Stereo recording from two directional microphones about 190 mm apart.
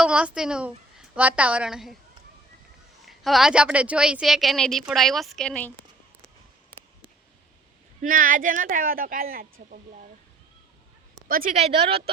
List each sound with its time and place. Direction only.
0.0 s a woman's voice: 5° right (ahead or behind)
3.1 s speech: centre (ahead or behind)
8.0 s speech: 45° right (ahead or behind)
11.3 s speech: 50° right (ahead or behind)
11.5 s speech: 30° right (ahead or behind)